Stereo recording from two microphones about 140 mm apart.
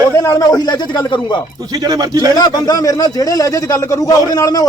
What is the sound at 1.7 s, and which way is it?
Speech, 30° right (ahead or behind).